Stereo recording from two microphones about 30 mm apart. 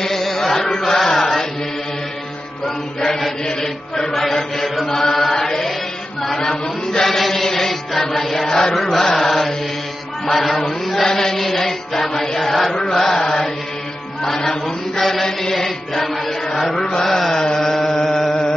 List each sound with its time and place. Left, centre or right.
0.0 s chant: centre
3.6 s chant: centre
4.1 s mantra: centre
4.8 s chant: centre
7.1 s chant: centre
7.4 s music: centre
8.5 s chant: left
8.7 s chant: centre
11.1 s chant: centre
13.2 s mantra: left
14.5 s chant: centre
17.0 s mantra: centre
17.3 s chant: left
17.6 s chant: centre